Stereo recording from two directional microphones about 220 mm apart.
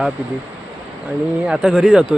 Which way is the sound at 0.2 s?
5° right (ahead or behind).